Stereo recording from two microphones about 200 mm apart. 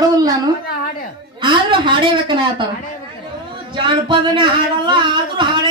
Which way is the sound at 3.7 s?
25° right (ahead or behind).